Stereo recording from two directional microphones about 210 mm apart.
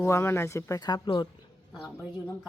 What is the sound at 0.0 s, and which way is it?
Speech, 10° left (ahead or behind).